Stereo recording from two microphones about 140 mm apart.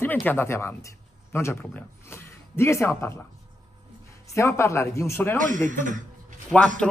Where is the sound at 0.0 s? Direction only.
15° left (ahead or behind).